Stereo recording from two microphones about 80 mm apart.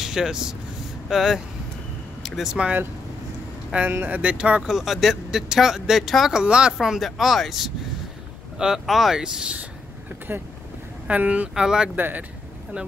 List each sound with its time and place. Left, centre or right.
0.0 s speech: centre
3.9 s speech: right
4.2 s speech: centre
10.3 s speech: right
11.1 s speech: centre
11.9 s speech: right